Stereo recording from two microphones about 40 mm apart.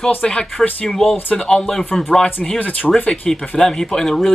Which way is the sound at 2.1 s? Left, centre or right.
Centre.